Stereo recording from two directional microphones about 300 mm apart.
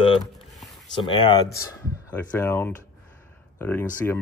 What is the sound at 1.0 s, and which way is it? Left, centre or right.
Speech, centre.